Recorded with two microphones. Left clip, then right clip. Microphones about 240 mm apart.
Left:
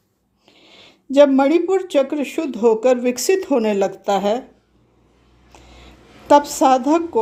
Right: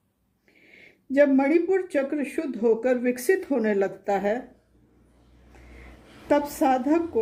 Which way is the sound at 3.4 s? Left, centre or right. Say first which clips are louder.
Left 7 dB; left.